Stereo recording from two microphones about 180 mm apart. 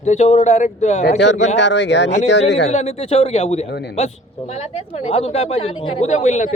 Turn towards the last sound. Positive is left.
turn(degrees=40)  # may be behind; listen again after turning